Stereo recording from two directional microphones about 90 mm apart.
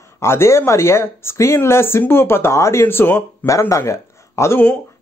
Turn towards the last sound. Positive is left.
turn(degrees=30)  # may be behind; listen again after turning